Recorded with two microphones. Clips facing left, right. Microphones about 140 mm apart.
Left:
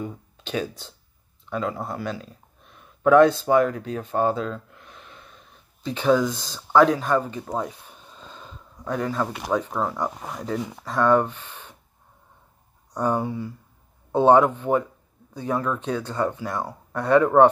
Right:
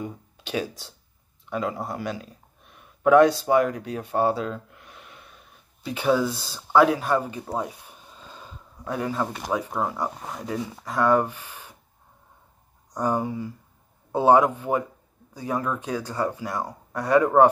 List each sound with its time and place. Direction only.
0.0 s speech: 10° right (ahead or behind)
2.7 s a sound: 10° right (ahead or behind)
3.4 s speech: 15° right (ahead or behind)
10.6 s speech: 20° left (ahead or behind)
10.9 s speech: 10° right (ahead or behind)
12.9 s speech: 10° right (ahead or behind)